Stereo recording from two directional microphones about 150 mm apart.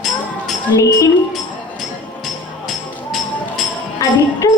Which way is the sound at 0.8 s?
20° left (ahead or behind).